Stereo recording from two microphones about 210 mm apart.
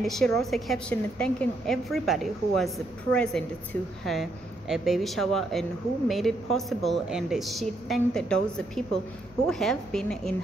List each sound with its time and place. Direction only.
0.0 s speech: centre (ahead or behind)